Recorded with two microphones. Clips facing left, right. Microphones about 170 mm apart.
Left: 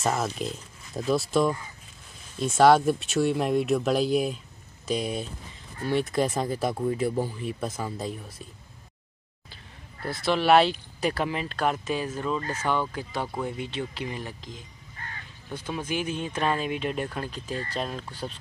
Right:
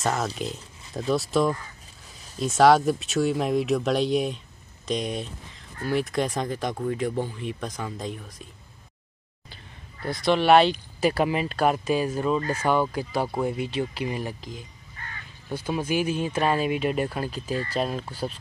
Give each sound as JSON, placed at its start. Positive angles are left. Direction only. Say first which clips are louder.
{"t": 0.0, "sound": "speech", "louder": "even", "side_deg": 0}
{"t": 10.2, "sound": "speech", "louder": "right 2 dB", "side_deg": 0}
{"t": 15.0, "sound": "crow", "louder": "even", "side_deg": 35}
{"t": 15.5, "sound": "speech", "louder": "right 5 dB", "side_deg": -10}